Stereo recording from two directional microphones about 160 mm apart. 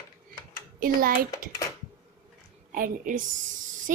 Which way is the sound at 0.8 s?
60° right (ahead or behind).